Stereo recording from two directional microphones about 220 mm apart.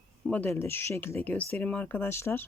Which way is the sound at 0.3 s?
10° left (ahead or behind).